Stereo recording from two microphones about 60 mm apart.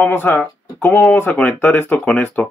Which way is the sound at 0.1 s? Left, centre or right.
Left.